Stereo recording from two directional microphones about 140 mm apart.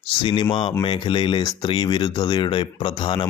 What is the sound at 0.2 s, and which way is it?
Speech, 35° left (ahead or behind).